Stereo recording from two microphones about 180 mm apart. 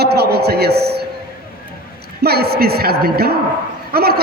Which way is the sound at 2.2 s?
60° right (ahead or behind).